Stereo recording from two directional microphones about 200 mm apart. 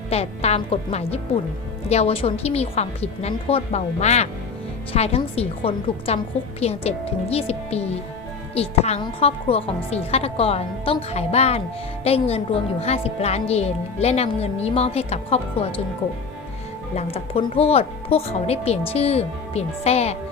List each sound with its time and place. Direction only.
0.1 s a woman's voice: 30° left (ahead or behind)
16.9 s a woman's voice: 30° left (ahead or behind)